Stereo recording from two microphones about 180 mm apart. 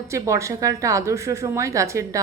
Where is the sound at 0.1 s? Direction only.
15° right (ahead or behind).